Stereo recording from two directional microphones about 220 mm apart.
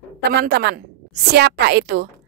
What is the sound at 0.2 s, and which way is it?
A woman's voice, 45° right (ahead or behind).